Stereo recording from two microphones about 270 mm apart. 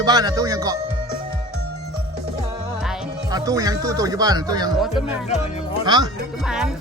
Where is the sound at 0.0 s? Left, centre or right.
Centre.